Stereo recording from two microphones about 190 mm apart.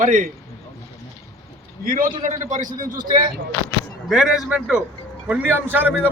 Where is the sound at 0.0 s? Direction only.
45° right (ahead or behind).